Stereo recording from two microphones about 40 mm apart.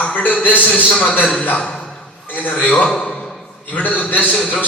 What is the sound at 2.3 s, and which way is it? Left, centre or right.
Speech, left.